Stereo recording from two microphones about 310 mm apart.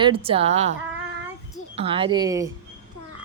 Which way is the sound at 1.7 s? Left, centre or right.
Centre.